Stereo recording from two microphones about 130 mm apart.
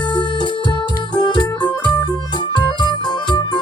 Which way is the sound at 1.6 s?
35° left (ahead or behind).